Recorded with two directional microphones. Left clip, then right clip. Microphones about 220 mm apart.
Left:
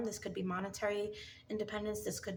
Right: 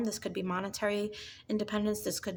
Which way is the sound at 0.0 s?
45° right (ahead or behind).